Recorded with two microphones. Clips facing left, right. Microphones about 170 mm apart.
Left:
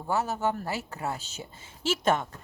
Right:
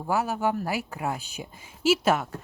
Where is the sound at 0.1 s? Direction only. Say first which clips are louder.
Right 2 dB; 10° right (ahead or behind).